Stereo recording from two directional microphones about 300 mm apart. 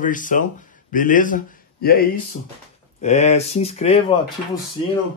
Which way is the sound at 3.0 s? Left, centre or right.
Left.